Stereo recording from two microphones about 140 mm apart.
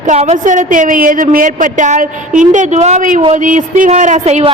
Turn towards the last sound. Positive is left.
turn(degrees=-50)  # may be behind; listen again after turning